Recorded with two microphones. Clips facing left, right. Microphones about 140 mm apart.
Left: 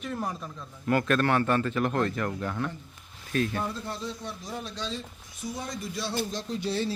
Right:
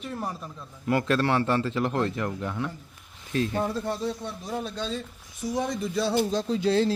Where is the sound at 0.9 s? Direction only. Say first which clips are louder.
Right 1 dB; 25° right (ahead or behind).